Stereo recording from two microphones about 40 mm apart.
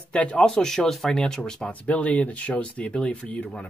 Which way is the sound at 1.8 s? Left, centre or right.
Left.